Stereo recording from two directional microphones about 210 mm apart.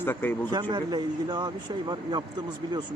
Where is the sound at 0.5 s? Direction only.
20° right (ahead or behind).